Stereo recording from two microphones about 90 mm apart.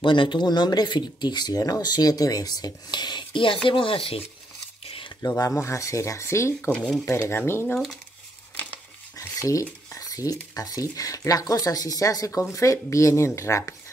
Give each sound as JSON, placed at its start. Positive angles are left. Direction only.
{"t": 0.0, "sound": "speech", "side_deg": 60}
{"t": 3.6, "sound": "speech", "side_deg": 75}
{"t": 4.8, "sound": "a sound", "side_deg": 80}
{"t": 5.4, "sound": "speech", "side_deg": 35}
{"t": 9.4, "sound": "speech", "side_deg": 40}